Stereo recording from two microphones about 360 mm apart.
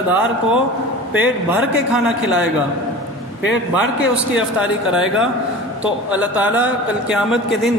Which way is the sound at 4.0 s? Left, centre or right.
Centre.